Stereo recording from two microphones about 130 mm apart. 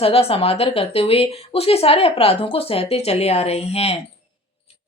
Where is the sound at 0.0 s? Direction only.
50° left (ahead or behind).